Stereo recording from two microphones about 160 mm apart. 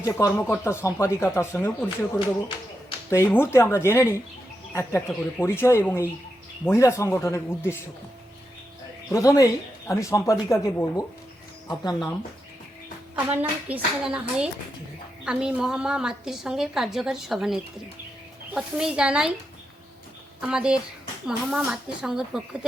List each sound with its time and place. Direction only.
0.0 s speech: 20° left (ahead or behind)
3.1 s speech: 15° left (ahead or behind)
9.1 s speech: 20° left (ahead or behind)
13.1 s a woman's voice: 10° right (ahead or behind)
20.4 s a woman's voice: 5° right (ahead or behind)